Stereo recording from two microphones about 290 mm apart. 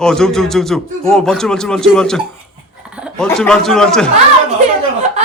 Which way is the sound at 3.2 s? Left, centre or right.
Centre.